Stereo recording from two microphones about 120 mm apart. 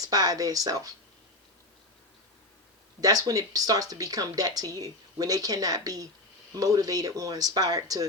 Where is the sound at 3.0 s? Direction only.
30° right (ahead or behind).